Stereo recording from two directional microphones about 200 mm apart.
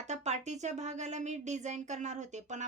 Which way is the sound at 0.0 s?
35° right (ahead or behind).